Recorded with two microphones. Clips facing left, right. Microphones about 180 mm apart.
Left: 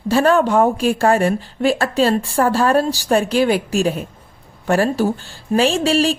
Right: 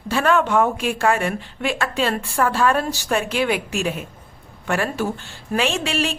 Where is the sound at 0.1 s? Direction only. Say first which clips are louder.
Left 4 dB; 35° left (ahead or behind).